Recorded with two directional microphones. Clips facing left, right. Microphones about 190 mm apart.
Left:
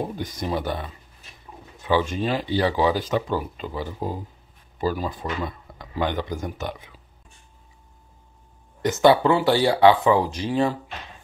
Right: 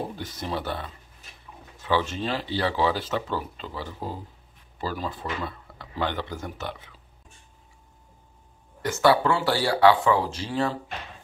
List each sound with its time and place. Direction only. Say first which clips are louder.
0.1 s speech: left 4 dB; 15° left (ahead or behind)
8.8 s speech: left 4 dB; 20° left (ahead or behind)